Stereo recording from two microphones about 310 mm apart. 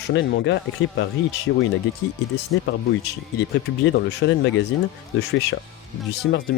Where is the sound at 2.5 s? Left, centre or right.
Left.